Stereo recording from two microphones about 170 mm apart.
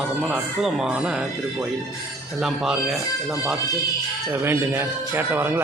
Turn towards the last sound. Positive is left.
turn(degrees=-10)  # may be behind; listen again after turning